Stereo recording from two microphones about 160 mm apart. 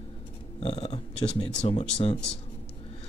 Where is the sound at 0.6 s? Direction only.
40° left (ahead or behind).